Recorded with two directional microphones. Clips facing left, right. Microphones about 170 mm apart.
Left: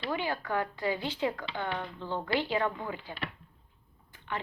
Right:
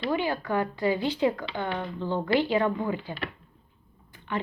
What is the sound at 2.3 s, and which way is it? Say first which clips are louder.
A woman's voice: right 6 dB; 15° right (ahead or behind).